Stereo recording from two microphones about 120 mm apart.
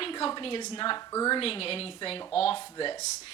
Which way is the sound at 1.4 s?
50° left (ahead or behind).